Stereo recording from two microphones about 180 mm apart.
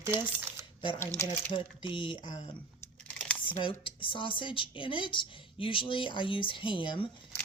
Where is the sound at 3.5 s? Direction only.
30° left (ahead or behind).